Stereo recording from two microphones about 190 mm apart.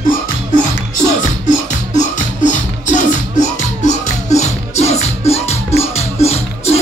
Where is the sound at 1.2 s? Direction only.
40° left (ahead or behind).